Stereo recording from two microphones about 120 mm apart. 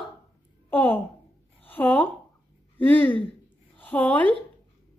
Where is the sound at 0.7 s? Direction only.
15° left (ahead or behind).